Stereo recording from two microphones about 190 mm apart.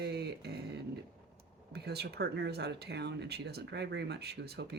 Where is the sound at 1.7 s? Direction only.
60° right (ahead or behind).